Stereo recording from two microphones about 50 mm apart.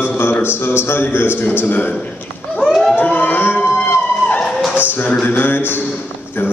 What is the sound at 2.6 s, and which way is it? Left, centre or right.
Emergency vehicle, centre.